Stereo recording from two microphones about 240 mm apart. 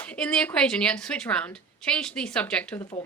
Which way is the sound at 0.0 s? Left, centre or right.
Centre.